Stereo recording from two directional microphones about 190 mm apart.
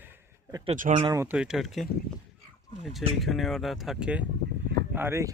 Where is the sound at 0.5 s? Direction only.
30° right (ahead or behind).